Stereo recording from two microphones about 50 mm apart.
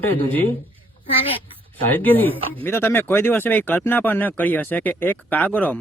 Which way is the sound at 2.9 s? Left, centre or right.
Left.